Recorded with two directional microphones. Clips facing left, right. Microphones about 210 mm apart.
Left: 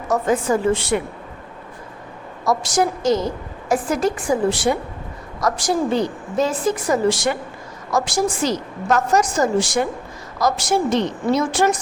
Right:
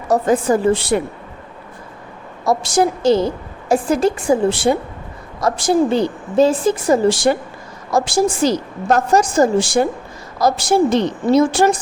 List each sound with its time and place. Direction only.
0.1 s a woman's voice: 35° right (ahead or behind)
2.4 s a woman's voice: 30° right (ahead or behind)